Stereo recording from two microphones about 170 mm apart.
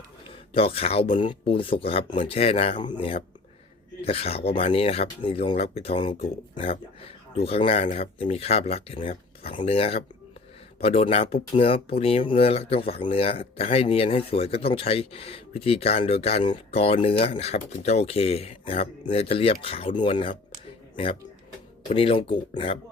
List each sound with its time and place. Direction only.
0.5 s speech: 35° left (ahead or behind)